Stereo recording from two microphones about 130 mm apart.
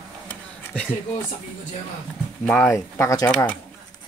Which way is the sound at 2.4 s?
20° left (ahead or behind).